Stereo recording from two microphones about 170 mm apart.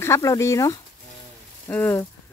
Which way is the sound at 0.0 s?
15° left (ahead or behind).